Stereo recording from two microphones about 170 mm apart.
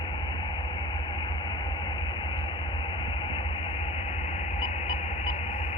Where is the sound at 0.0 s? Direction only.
25° left (ahead or behind).